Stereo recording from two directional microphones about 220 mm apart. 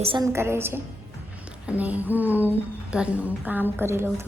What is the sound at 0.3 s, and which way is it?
A woman's voice, 10° right (ahead or behind).